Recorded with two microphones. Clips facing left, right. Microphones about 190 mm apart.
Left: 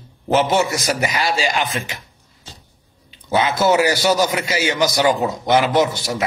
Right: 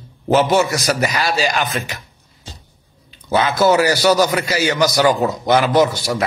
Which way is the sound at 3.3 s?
20° left (ahead or behind).